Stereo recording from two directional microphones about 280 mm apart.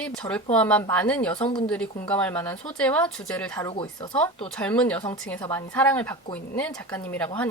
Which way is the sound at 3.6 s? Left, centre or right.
Centre.